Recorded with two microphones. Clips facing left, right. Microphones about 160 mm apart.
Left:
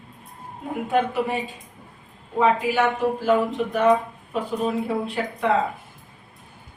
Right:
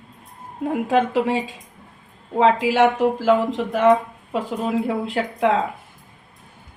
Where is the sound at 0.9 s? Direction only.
90° right.